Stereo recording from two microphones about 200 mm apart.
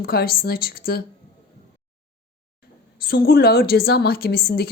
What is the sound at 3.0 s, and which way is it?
A woman's voice, 50° left (ahead or behind).